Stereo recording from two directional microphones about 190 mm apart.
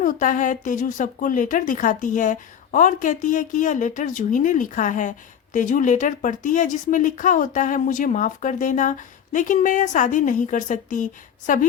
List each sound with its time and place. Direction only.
0.0 s speech: 45° left (ahead or behind)